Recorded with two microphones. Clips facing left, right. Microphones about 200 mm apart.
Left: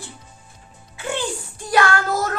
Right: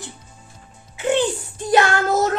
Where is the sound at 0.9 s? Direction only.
20° right (ahead or behind).